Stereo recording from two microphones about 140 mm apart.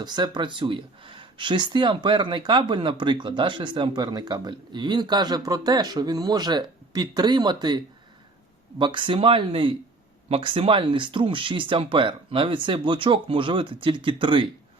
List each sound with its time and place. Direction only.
0.0 s speech: 30° right (ahead or behind)
8.8 s speech: 35° right (ahead or behind)